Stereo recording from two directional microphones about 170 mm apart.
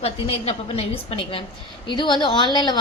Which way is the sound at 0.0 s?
35° left (ahead or behind).